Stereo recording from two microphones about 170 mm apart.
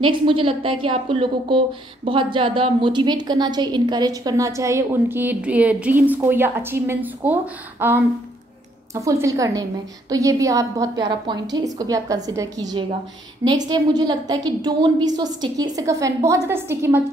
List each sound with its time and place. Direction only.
0.0 s a woman's voice: 30° right (ahead or behind); by 17.0 s 15° right (ahead or behind)